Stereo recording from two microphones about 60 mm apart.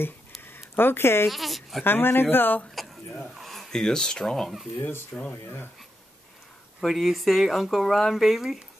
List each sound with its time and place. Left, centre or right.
0.7 s speech: left
1.3 s speech: centre
1.9 s speech: left
3.3 s speech: centre
4.7 s speech: left
5.1 s speech: left
6.8 s speech: centre